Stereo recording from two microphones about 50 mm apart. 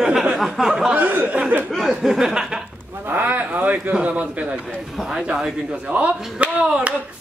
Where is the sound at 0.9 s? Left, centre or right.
Right.